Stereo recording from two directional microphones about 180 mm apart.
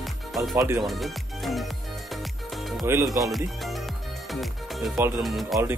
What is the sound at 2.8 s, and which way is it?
Speech, 15° right (ahead or behind).